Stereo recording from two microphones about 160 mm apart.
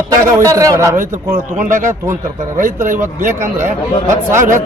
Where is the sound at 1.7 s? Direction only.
55° right (ahead or behind).